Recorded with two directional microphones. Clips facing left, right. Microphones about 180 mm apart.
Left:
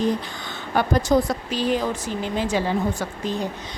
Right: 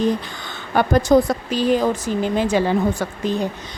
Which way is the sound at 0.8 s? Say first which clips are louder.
Right 4 dB; 55° right (ahead or behind).